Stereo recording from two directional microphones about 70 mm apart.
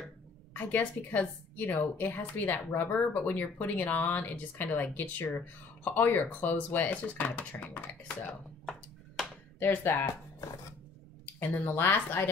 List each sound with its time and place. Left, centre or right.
0.5 s a woman's voice: left
8.6 s a sound: centre
9.6 s speech: left
11.3 s speech: left